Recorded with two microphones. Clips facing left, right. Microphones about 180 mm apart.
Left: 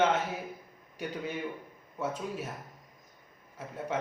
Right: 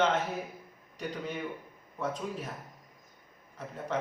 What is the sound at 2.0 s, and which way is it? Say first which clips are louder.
Speech: even; 10° left (ahead or behind).